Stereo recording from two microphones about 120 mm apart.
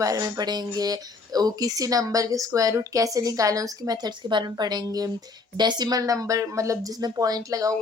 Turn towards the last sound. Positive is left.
turn(degrees=-30)  # may be behind; listen again after turning